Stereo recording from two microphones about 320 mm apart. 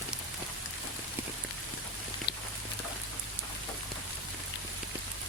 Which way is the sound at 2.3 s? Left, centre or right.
Left.